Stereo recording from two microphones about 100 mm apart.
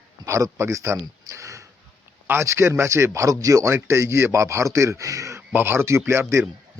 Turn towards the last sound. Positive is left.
turn(degrees=-25)  # may be behind; listen again after turning